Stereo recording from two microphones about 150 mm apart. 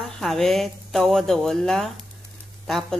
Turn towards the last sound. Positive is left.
turn(degrees=0)  # may be behind; listen again after turning